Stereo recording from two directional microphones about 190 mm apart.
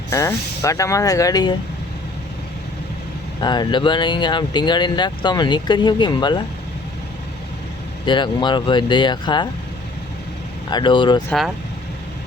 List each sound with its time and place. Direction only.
0.1 s speech: 15° left (ahead or behind)
3.4 s speech: 20° left (ahead or behind)
8.0 s speech: 25° left (ahead or behind)
10.7 s speech: 25° left (ahead or behind)
11.3 s speech: centre (ahead or behind)